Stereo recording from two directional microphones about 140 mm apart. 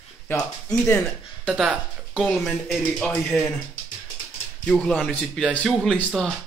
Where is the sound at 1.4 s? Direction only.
5° right (ahead or behind).